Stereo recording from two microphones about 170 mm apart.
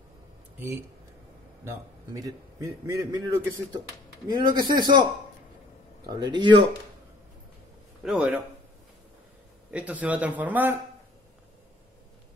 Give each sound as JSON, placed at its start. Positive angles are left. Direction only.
{"t": 0.6, "sound": "a man's voice", "side_deg": -15}
{"t": 6.0, "sound": "a man's voice", "side_deg": -25}
{"t": 8.0, "sound": "a man's voice", "side_deg": -5}
{"t": 9.7, "sound": "a man's voice", "side_deg": -10}